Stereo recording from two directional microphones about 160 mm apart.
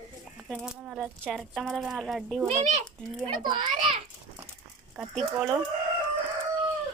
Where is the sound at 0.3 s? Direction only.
5° right (ahead or behind).